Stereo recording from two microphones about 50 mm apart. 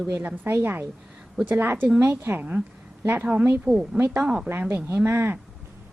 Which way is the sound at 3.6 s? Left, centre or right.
Centre.